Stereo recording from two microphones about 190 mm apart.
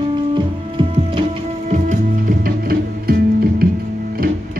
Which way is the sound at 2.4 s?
55° right (ahead or behind).